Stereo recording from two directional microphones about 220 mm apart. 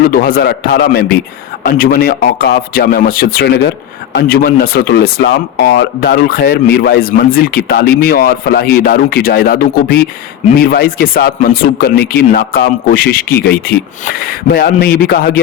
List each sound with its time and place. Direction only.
0.1 s speech: 40° left (ahead or behind)